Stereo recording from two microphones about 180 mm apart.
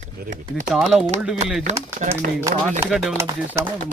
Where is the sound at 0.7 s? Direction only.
5° right (ahead or behind).